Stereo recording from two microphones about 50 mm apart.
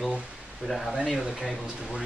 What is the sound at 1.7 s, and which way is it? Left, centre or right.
Speech, centre.